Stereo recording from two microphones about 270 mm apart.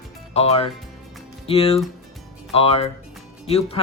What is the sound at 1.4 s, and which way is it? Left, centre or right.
Speech, left.